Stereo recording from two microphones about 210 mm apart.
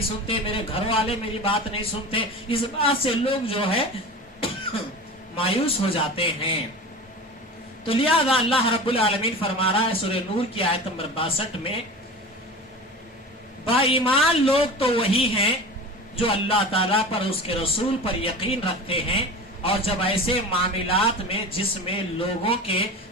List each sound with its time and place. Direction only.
0.3 s a man's voice: 25° left (ahead or behind)
5.4 s a man's voice: 25° left (ahead or behind)
7.9 s a man's voice: 25° left (ahead or behind)
13.7 s a man's voice: 25° left (ahead or behind)